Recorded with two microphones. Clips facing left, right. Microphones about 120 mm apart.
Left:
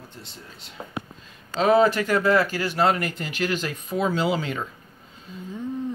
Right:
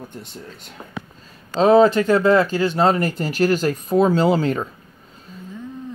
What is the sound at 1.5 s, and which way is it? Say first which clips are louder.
Speech: right 5 dB; 30° right (ahead or behind).